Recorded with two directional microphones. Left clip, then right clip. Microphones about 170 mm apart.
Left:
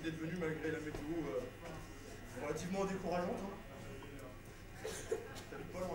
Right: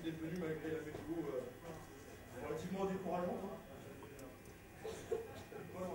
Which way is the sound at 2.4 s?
30° left (ahead or behind).